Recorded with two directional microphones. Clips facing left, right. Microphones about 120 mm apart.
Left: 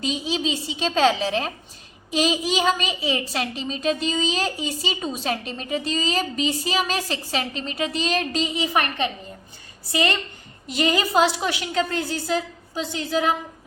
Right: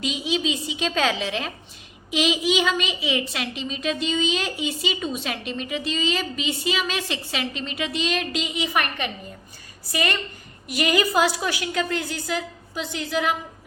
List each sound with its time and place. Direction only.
0.0 s a woman's voice: 35° left (ahead or behind)